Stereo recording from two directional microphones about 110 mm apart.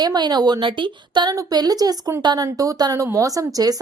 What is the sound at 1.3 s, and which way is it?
A woman's voice, 35° right (ahead or behind).